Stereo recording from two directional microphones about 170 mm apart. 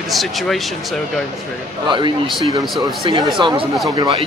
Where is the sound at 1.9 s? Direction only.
25° right (ahead or behind).